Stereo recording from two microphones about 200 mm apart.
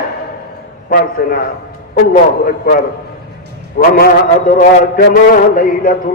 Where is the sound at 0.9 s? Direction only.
45° left (ahead or behind).